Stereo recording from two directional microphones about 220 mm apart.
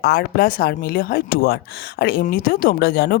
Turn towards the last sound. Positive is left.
turn(degrees=45)  # may be behind; listen again after turning